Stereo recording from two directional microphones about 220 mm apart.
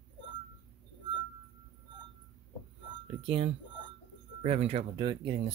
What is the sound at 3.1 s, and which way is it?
Speech, 25° right (ahead or behind).